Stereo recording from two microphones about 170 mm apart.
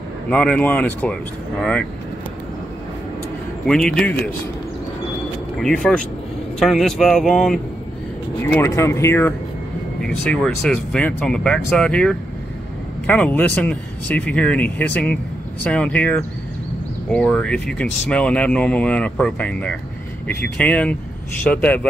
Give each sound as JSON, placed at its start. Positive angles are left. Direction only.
{"t": 0.3, "sound": "speech", "side_deg": 10}
{"t": 3.6, "sound": "speech", "side_deg": 5}
{"t": 5.6, "sound": "speech", "side_deg": 5}
{"t": 8.5, "sound": "speech", "side_deg": 15}
{"t": 10.0, "sound": "speech", "side_deg": 5}